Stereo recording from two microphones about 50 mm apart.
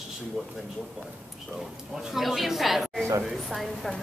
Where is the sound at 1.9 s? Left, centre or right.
Centre.